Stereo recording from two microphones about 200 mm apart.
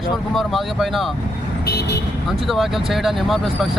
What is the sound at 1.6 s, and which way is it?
Vehicle, 50° left (ahead or behind).